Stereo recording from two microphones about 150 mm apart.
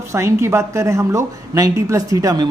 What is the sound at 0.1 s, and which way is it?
Speech, 20° right (ahead or behind).